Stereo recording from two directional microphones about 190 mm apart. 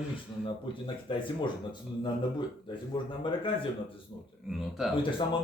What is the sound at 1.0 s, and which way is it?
Speech, 25° left (ahead or behind).